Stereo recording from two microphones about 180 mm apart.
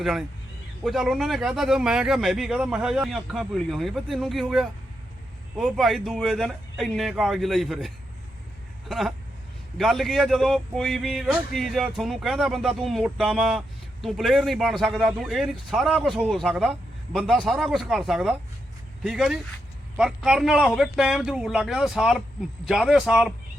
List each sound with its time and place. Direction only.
0.0 s a man's voice: 5° right (ahead or behind)